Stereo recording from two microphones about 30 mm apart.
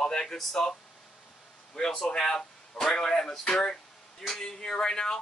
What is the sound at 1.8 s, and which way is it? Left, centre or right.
Speech, left.